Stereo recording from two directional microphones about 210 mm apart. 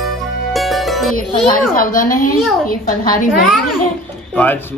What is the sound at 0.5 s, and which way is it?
Music, centre (ahead or behind).